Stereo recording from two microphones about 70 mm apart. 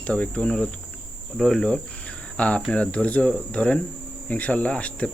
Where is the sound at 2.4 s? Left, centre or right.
Centre.